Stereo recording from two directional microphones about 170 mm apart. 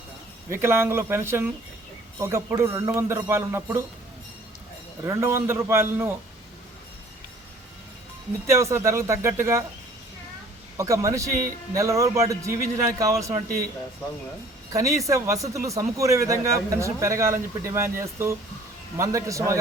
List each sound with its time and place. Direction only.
0.5 s speech: 15° right (ahead or behind)
5.0 s speech: 15° right (ahead or behind)
8.4 s speech: 15° right (ahead or behind)
10.8 s a man's voice: 20° right (ahead or behind)
14.7 s a man's voice: 20° right (ahead or behind)